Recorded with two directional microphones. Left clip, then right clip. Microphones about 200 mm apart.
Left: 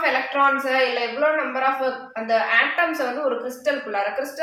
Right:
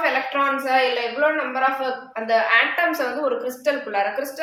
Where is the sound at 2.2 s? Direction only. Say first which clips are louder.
Right 1 dB; 30° right (ahead or behind).